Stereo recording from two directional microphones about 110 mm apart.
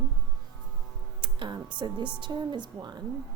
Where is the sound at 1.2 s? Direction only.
45° right (ahead or behind).